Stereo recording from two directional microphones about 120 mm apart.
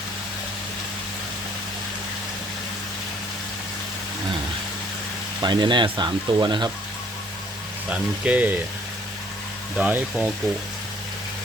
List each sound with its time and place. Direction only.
5.4 s speech: 40° right (ahead or behind)
7.9 s speech: 10° right (ahead or behind)
9.7 s speech: 10° right (ahead or behind)